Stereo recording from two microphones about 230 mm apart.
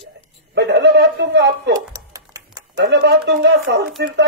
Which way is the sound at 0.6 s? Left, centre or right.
Right.